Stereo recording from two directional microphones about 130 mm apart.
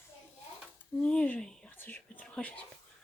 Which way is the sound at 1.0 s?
10° left (ahead or behind).